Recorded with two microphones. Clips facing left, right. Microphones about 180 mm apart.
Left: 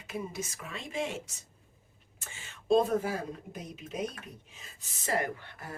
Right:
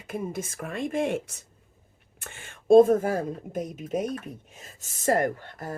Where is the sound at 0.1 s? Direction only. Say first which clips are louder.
Right 5 dB; 50° right (ahead or behind).